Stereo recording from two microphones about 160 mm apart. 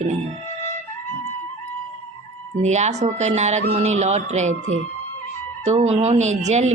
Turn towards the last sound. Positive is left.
turn(degrees=-45)  # may be behind; listen again after turning